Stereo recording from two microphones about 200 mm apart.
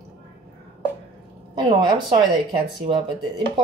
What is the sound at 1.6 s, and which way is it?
Speech, 25° right (ahead or behind).